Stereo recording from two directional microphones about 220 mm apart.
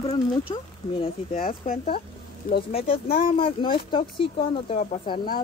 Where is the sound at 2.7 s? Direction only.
25° left (ahead or behind).